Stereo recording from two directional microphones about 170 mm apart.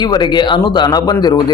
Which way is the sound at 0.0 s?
25° left (ahead or behind).